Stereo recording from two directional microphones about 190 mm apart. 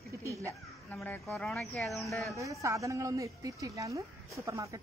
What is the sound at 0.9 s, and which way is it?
Speech, 5° left (ahead or behind).